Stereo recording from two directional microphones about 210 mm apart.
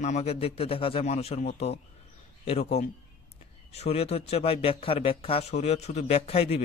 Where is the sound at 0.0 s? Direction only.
30° left (ahead or behind).